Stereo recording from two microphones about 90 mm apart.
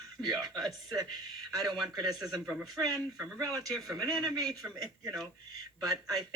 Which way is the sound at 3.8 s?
45° right (ahead or behind).